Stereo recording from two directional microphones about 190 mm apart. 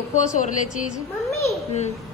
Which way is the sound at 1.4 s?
35° left (ahead or behind).